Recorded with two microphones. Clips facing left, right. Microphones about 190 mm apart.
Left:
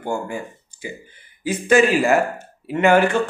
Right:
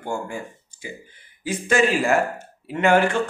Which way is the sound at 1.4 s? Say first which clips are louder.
Left 4 dB; 5° left (ahead or behind).